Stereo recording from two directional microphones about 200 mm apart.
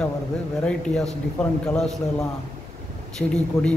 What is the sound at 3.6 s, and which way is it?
Speech, 15° left (ahead or behind).